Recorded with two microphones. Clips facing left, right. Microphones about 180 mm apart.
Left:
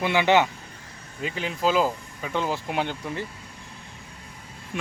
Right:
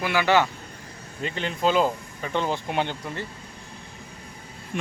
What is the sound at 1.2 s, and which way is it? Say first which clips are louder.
Speech: right 1 dB; 5° left (ahead or behind).